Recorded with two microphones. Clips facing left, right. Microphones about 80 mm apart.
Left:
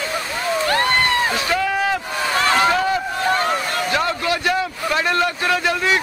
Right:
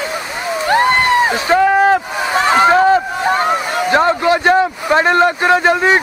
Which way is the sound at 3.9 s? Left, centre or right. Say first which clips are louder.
Right 10 dB; right.